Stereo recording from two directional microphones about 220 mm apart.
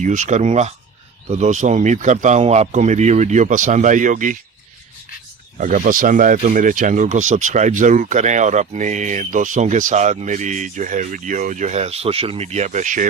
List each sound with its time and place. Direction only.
0.0 s speech: 35° right (ahead or behind)
5.5 s speech: 35° right (ahead or behind)